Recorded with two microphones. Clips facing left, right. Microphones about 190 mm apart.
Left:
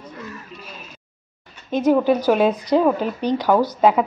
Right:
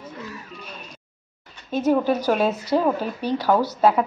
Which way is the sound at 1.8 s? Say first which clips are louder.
Left 3 dB; 10° left (ahead or behind).